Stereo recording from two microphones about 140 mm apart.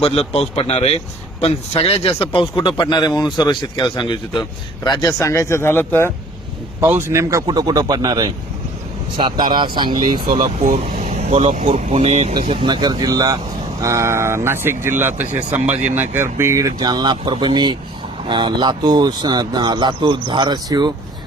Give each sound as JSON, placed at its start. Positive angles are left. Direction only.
{"t": 0.0, "sound": "speech", "side_deg": 45}
{"t": 6.8, "sound": "speech", "side_deg": -15}
{"t": 10.6, "sound": "speech", "side_deg": -65}
{"t": 11.7, "sound": "speech", "side_deg": -45}
{"t": 12.5, "sound": "speech", "side_deg": -30}